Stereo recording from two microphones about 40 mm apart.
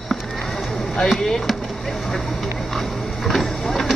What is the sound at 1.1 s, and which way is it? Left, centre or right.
Speech, centre.